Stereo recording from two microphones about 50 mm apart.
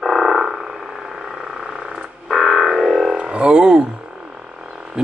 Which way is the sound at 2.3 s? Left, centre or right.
Centre.